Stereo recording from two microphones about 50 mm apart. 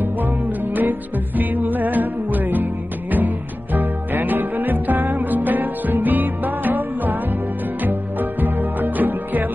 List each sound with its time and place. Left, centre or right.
0.0 s music: right